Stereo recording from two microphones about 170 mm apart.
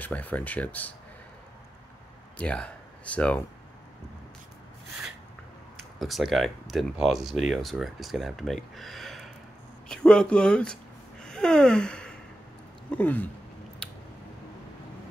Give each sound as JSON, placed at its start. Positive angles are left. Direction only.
{"t": 0.0, "sound": "speech", "side_deg": 10}
{"t": 2.3, "sound": "speech", "side_deg": 5}
{"t": 5.9, "sound": "speech", "side_deg": 0}
{"t": 8.7, "sound": "a sound", "side_deg": 0}
{"t": 9.8, "sound": "speech", "side_deg": 5}
{"t": 13.8, "sound": "scissors", "side_deg": 5}